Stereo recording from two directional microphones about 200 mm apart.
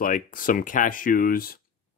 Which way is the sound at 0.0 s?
45° left (ahead or behind).